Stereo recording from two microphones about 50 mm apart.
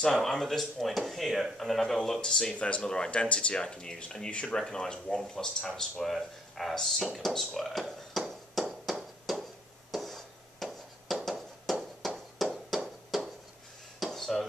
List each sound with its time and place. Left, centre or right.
0.2 s speech: centre; by 4.6 s left
4.6 s speech: centre
8.1 s a sound: centre
14.1 s dishes: centre